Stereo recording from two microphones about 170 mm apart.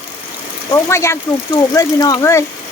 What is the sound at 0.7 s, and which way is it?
Speech, 15° left (ahead or behind).